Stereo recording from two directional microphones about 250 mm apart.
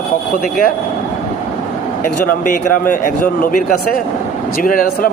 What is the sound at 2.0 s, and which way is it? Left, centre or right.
Speech, left.